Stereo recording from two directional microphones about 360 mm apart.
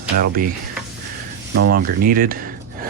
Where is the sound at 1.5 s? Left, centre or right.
Right.